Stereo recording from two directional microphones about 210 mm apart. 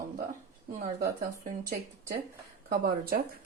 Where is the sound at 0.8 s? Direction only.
40° right (ahead or behind).